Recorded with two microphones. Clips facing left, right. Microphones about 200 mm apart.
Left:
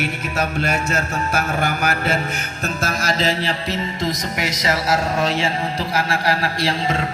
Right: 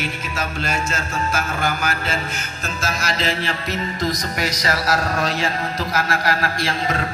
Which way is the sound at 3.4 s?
25° left (ahead or behind).